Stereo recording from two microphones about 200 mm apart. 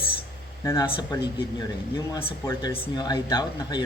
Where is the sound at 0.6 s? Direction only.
15° left (ahead or behind).